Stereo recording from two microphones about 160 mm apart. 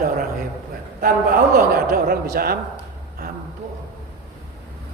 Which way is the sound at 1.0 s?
65° right (ahead or behind).